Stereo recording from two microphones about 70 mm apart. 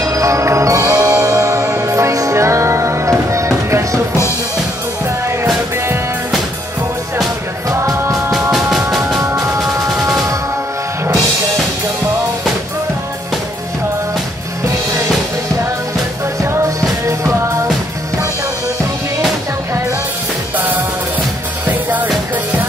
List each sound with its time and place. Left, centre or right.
0.0 s music: right
8.3 s music: centre
9.2 s music: right
16.3 s music: right
20.5 s music: right